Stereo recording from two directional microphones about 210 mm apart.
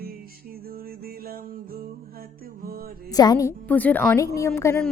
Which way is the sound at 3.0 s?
20° left (ahead or behind).